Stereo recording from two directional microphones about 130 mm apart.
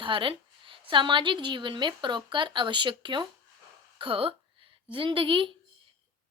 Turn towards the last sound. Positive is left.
turn(degrees=-40)  # may be behind; listen again after turning